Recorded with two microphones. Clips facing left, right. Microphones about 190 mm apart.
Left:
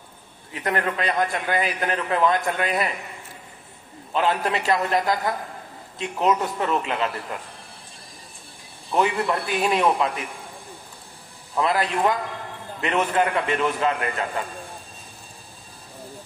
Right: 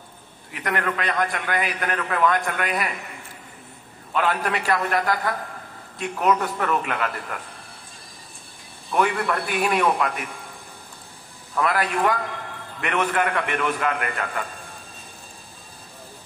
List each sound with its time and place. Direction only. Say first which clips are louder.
0.5 s a man's voice: left 1 dB; 30° left (ahead or behind)
4.1 s a man's voice: left 1 dB; 25° left (ahead or behind)
8.9 s a man's voice: even; 20° left (ahead or behind)
11.5 s a man's voice: left 1 dB; 20° left (ahead or behind)